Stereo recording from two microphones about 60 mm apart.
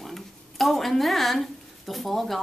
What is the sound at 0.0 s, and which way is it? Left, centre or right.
A woman's voice, centre.